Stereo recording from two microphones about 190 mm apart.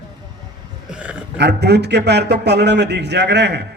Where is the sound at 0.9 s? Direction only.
5° right (ahead or behind).